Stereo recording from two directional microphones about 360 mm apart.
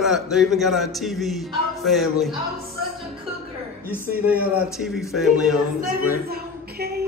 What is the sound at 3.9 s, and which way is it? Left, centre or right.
A man's voice, centre.